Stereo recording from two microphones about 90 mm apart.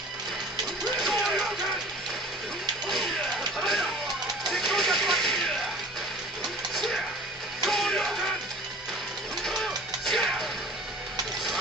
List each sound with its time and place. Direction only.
1.0 s music: centre (ahead or behind)
3.5 s music: centre (ahead or behind)
4.5 s a sound: centre (ahead or behind)
6.7 s music: 5° left (ahead or behind)
9.4 s music: 5° left (ahead or behind)